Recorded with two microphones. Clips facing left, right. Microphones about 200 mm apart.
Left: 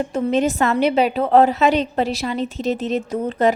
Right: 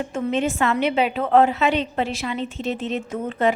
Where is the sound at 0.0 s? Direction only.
40° left (ahead or behind).